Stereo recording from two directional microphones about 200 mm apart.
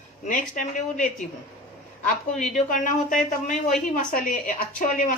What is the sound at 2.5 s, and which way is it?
Speech, 40° left (ahead or behind).